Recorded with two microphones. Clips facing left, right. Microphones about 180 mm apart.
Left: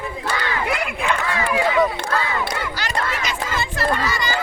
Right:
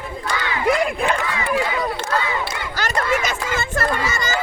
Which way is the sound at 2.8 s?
45° right (ahead or behind).